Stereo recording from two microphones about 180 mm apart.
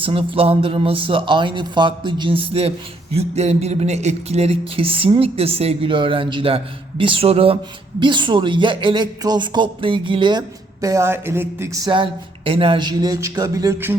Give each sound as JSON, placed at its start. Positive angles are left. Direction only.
{"t": 0.0, "sound": "speech", "side_deg": -30}
{"t": 12.5, "sound": "speech", "side_deg": -30}